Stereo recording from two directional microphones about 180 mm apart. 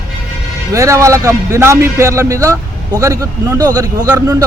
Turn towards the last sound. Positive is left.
turn(degrees=-20)  # may be behind; listen again after turning